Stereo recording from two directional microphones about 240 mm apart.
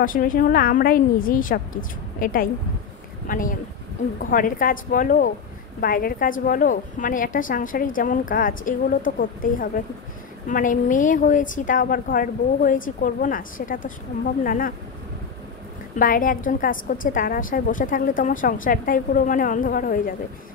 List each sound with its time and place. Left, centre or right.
0.0 s a woman's voice: left
16.0 s a woman's voice: left